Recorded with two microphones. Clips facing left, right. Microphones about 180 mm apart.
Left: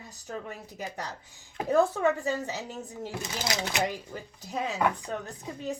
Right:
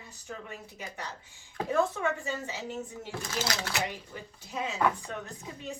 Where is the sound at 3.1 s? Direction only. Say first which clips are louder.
Even; 15° left (ahead or behind).